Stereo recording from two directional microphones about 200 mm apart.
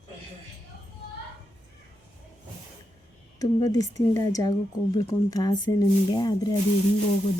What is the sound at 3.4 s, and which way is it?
A woman's voice, 15° left (ahead or behind).